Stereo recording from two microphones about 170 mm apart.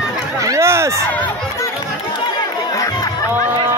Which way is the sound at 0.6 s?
15° right (ahead or behind).